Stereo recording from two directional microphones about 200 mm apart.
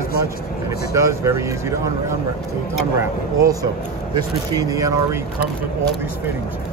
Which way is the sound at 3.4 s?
15° right (ahead or behind).